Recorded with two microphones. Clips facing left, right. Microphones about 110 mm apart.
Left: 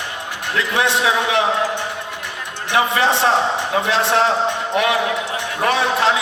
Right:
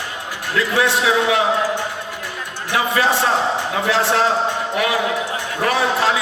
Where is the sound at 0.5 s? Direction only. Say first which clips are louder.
Right 1 dB; 20° left (ahead or behind).